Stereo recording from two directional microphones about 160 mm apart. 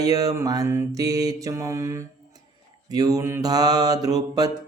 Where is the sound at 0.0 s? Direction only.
20° right (ahead or behind).